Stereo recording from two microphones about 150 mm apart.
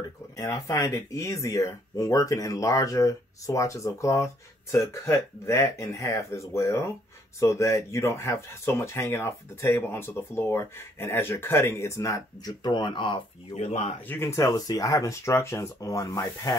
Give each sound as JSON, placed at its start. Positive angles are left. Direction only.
{"t": 0.4, "sound": "speech", "side_deg": 20}
{"t": 13.6, "sound": "speech", "side_deg": 45}
{"t": 14.0, "sound": "speech", "side_deg": 15}